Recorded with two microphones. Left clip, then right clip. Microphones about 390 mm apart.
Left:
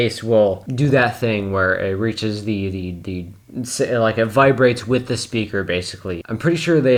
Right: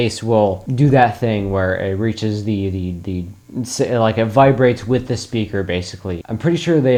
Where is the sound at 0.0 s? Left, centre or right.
Right.